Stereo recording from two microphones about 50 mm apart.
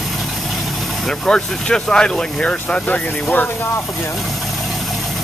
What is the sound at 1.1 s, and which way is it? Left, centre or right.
Speech, centre.